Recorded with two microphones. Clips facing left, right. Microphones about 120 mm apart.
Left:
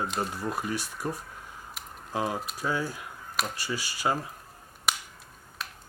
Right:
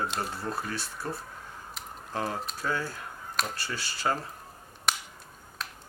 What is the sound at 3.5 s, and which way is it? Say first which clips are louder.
Speech: left 2 dB; 10° left (ahead or behind).